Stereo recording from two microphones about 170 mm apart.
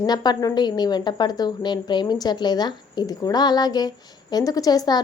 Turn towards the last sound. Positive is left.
turn(degrees=20)  # may be behind; listen again after turning